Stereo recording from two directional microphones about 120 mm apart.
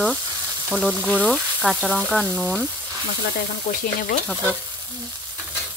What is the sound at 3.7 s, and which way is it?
Stir, 90° left.